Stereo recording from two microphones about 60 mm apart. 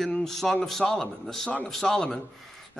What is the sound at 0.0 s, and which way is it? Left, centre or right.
A man's voice, centre.